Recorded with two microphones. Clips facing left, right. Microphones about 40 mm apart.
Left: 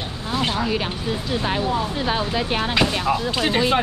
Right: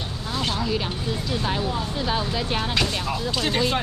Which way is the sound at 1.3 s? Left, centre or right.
Left.